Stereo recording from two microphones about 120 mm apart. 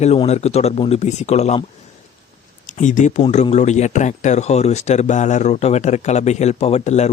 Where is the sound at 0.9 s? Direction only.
70° left (ahead or behind).